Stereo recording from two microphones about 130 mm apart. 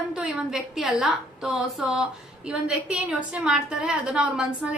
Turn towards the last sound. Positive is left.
turn(degrees=-5)  # may be behind; listen again after turning